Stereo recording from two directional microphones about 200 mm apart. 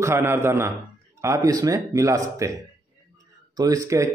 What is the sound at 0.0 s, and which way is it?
Speech, 10° right (ahead or behind).